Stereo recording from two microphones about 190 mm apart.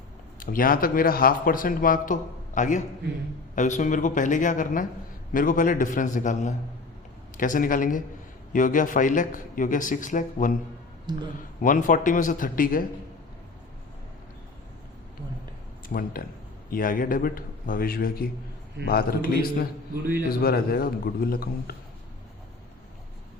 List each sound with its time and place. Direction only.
0.3 s a man's voice: 50° left (ahead or behind)
11.1 s speech: 25° right (ahead or behind)
11.6 s speech: 45° left (ahead or behind)
15.9 s speech: 50° left (ahead or behind)